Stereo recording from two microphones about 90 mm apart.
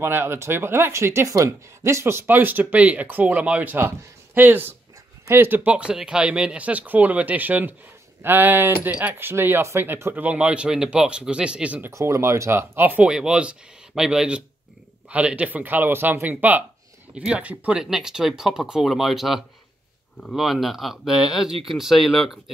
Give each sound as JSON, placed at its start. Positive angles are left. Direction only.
{"t": 0.0, "sound": "speech", "side_deg": -25}
{"t": 10.2, "sound": "speech", "side_deg": -10}
{"t": 11.9, "sound": "speech", "side_deg": -35}
{"t": 13.1, "sound": "speech", "side_deg": -10}